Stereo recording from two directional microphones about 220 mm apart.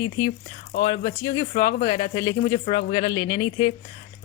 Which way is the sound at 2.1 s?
25° left (ahead or behind).